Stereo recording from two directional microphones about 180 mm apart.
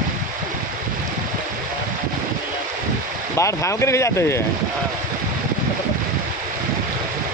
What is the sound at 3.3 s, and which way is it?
Speech, 15° left (ahead or behind).